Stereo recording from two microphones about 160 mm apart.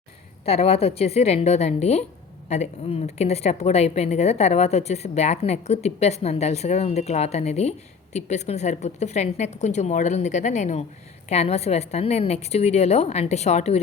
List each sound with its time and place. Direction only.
0.4 s a woman's voice: 40° left (ahead or behind)